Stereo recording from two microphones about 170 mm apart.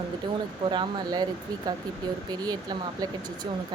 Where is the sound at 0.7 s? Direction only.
25° right (ahead or behind).